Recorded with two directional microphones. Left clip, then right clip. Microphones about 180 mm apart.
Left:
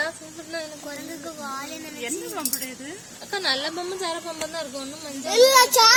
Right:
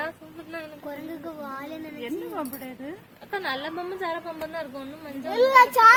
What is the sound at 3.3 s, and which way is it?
Speech, 30° left (ahead or behind).